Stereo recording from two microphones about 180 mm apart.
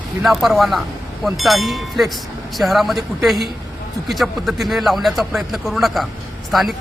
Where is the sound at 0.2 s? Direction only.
Centre (ahead or behind).